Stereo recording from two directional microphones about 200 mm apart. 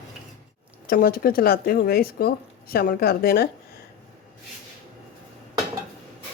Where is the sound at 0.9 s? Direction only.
45° left (ahead or behind).